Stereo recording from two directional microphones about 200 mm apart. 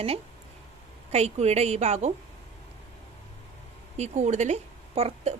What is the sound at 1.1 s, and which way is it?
Speech, 35° right (ahead or behind).